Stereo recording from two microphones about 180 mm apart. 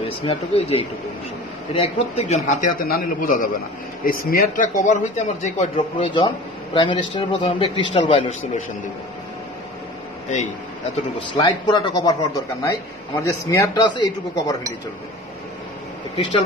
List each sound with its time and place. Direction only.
0.2 s speech: 30° left (ahead or behind)
6.1 s a man's voice: 25° left (ahead or behind)
11.1 s a man's voice: 25° left (ahead or behind)